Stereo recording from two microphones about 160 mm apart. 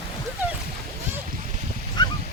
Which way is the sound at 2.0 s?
25° left (ahead or behind).